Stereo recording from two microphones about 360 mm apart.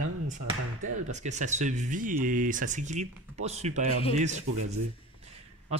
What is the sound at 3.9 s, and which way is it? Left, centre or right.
Speech, centre.